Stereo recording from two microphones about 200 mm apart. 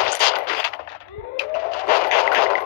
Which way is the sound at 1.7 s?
50° left (ahead or behind).